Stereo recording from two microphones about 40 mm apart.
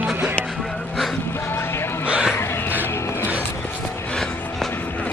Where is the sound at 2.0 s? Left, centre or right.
Right.